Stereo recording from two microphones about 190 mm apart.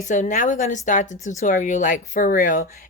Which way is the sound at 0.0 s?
40° left (ahead or behind).